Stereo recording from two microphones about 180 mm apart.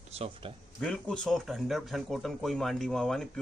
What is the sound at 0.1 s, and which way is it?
Speech, 35° right (ahead or behind).